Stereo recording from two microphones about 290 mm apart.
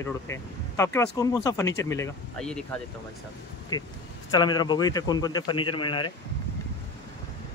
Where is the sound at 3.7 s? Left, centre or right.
Centre.